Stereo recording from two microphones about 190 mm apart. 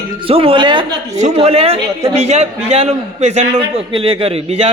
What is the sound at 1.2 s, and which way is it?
A man's voice, 35° right (ahead or behind).